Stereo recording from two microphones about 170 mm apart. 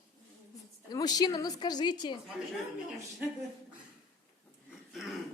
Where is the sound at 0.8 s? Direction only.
20° left (ahead or behind).